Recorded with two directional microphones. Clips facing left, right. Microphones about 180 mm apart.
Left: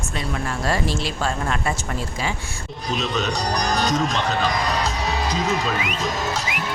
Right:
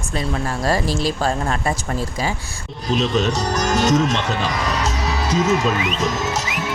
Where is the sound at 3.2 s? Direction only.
35° left (ahead or behind).